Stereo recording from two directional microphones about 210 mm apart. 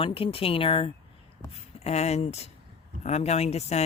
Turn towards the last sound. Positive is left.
turn(degrees=30)  # may be behind; listen again after turning